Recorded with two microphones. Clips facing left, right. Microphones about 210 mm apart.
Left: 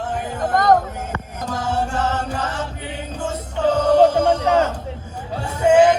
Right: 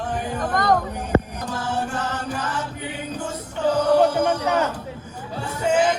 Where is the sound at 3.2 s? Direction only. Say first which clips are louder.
Left 4 dB; 25° left (ahead or behind).